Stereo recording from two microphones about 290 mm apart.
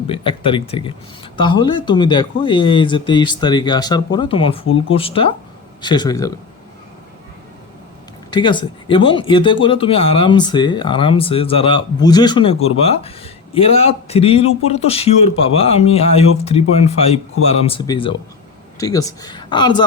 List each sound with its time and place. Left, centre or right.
0.1 s speech: centre
8.3 s speech: centre